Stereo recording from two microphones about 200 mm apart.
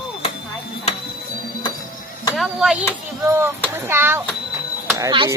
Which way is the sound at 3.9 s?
10° right (ahead or behind).